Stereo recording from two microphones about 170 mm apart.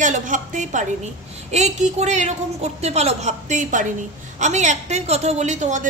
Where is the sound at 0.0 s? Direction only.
50° right (ahead or behind).